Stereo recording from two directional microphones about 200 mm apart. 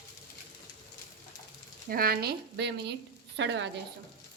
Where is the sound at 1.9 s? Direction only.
50° right (ahead or behind).